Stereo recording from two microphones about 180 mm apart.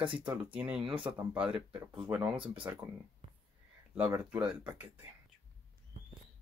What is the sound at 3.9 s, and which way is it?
Speech, 10° right (ahead or behind).